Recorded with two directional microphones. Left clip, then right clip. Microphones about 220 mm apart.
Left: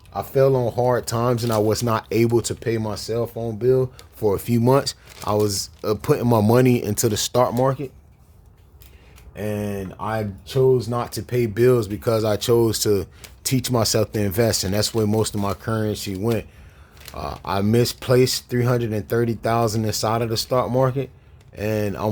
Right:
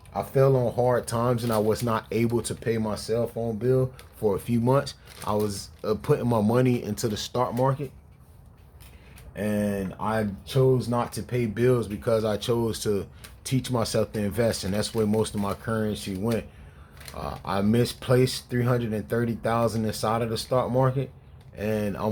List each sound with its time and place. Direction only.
0.1 s speech: 40° left (ahead or behind)
9.3 s speech: 35° left (ahead or behind)